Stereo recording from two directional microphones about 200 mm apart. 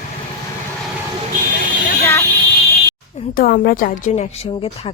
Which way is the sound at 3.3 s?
45° left (ahead or behind).